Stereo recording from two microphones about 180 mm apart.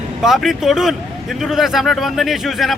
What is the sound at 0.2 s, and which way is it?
Speech, centre (ahead or behind).